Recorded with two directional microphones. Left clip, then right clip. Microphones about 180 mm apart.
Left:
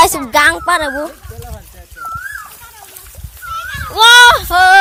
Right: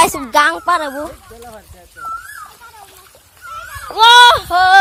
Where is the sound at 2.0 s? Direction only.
35° left (ahead or behind).